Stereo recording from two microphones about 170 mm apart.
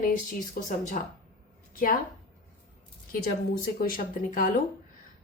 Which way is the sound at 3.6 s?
55° left (ahead or behind).